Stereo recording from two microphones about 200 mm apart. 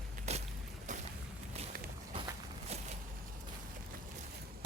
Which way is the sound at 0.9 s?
40° right (ahead or behind).